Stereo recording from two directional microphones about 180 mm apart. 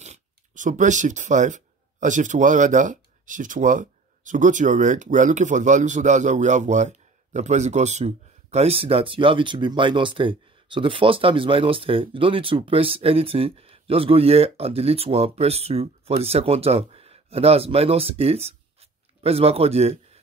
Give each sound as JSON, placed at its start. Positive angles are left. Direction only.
{"t": 0.0, "sound": "speech", "side_deg": -40}